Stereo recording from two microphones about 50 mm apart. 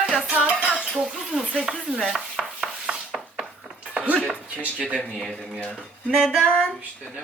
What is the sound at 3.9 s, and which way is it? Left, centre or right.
Music, right.